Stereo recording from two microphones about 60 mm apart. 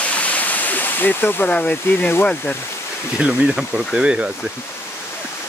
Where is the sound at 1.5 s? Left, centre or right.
Left.